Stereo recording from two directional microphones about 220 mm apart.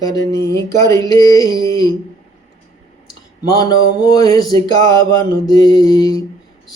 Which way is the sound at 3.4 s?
15° left (ahead or behind).